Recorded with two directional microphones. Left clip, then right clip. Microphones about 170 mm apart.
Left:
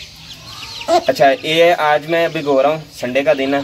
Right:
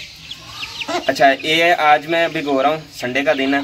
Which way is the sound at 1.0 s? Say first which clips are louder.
Right 2 dB; 15° left (ahead or behind).